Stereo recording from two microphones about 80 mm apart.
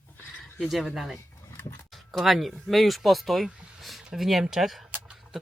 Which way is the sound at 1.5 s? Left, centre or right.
Left.